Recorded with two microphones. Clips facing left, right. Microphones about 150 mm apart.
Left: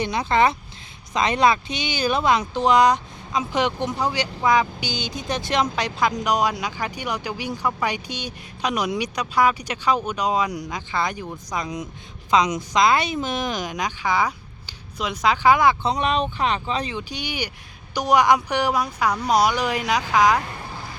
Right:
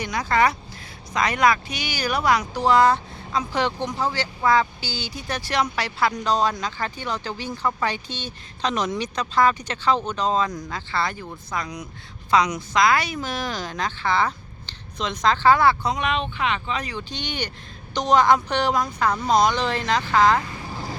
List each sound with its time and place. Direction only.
0.0 s speech: 25° left (ahead or behind)
15.8 s speech: 30° left (ahead or behind)
16.9 s speech: 10° left (ahead or behind)